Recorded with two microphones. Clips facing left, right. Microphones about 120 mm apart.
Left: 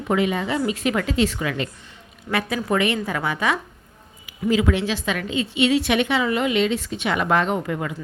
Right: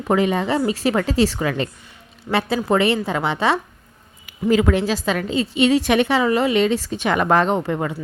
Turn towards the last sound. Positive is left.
turn(degrees=-30)  # may be behind; listen again after turning